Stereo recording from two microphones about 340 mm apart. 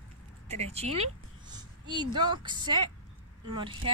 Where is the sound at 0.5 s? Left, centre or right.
Centre.